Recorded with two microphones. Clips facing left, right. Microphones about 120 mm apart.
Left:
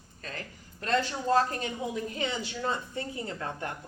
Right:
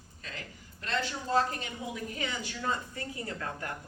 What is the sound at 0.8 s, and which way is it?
Speech, 40° left (ahead or behind).